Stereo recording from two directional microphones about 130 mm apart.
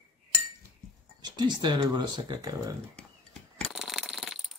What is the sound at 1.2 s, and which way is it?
Speech, 35° right (ahead or behind).